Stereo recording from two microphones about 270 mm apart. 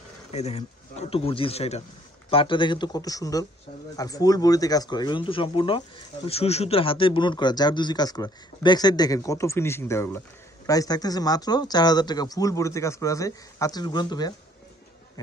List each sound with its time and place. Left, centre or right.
0.3 s speech: left